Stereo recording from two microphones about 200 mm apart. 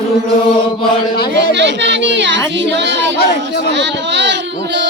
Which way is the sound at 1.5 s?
60° right (ahead or behind).